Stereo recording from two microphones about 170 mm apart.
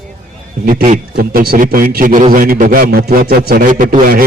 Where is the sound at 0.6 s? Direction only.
50° right (ahead or behind).